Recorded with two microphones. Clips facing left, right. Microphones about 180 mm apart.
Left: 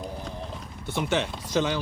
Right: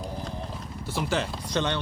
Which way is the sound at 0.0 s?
Centre (ahead or behind).